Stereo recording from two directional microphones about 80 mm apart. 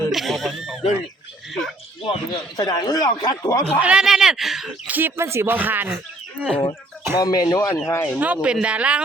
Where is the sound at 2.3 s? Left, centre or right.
Left.